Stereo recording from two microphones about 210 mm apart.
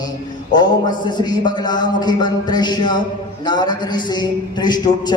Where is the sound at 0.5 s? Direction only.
20° left (ahead or behind).